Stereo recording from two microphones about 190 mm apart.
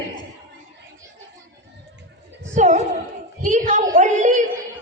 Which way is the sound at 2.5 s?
40° right (ahead or behind).